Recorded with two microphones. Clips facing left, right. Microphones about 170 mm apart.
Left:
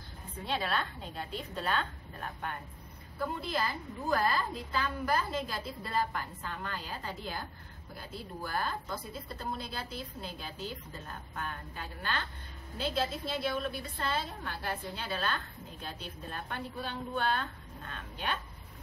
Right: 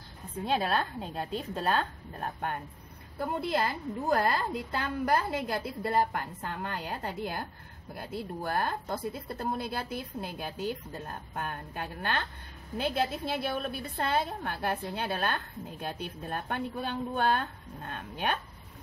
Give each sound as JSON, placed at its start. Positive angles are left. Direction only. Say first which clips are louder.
{"t": 0.5, "sound": "a woman's voice", "louder": "right 5 dB", "side_deg": -45}
{"t": 3.3, "sound": "a woman's voice", "louder": "right 8 dB", "side_deg": -60}